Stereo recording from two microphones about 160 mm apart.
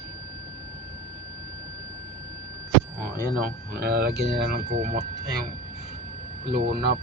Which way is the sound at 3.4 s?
80° right.